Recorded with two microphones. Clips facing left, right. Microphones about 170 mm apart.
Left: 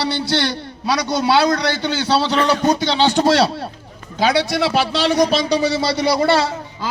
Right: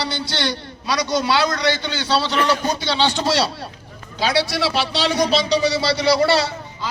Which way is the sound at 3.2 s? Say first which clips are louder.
Left 5 dB; 55° left (ahead or behind).